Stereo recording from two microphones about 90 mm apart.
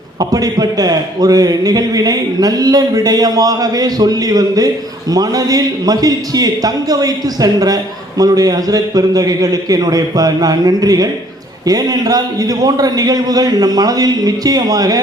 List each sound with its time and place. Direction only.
0.2 s a man's voice: 45° right (ahead or behind)